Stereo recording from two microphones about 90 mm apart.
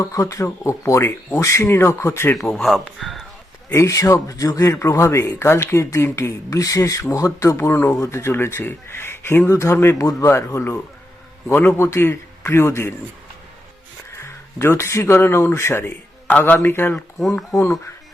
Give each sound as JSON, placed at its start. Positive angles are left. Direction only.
{"t": 0.0, "sound": "a man's voice", "side_deg": 35}
{"t": 2.6, "sound": "speech", "side_deg": 0}
{"t": 3.7, "sound": "a man's voice", "side_deg": 35}
{"t": 14.2, "sound": "a man's voice", "side_deg": 30}